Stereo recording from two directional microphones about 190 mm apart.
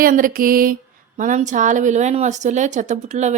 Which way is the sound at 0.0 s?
45° right (ahead or behind).